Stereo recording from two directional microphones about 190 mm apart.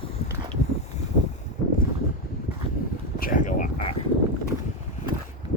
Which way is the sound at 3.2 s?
45° left (ahead or behind).